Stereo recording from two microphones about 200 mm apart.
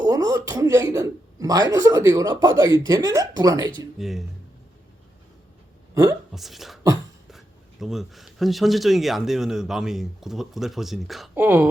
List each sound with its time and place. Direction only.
0.0 s speech: 20° right (ahead or behind)
3.9 s speech: centre (ahead or behind)
5.9 s speech: 15° right (ahead or behind)
6.3 s speech: centre (ahead or behind)